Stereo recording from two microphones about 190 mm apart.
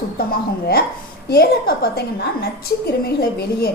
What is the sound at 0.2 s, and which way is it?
A woman's voice, 55° left (ahead or behind).